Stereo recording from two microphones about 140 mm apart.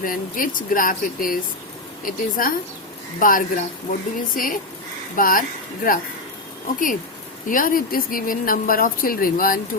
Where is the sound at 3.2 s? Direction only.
75° left (ahead or behind).